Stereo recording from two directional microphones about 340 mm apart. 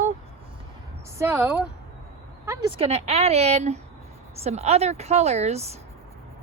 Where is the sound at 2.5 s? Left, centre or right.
Centre.